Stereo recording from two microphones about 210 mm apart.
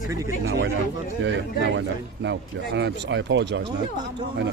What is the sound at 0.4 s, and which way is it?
Speech, 50° right (ahead or behind).